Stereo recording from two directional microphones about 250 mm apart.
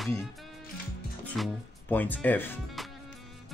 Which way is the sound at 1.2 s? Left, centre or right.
Centre.